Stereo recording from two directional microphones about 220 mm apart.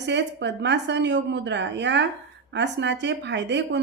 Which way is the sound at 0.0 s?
50° right (ahead or behind).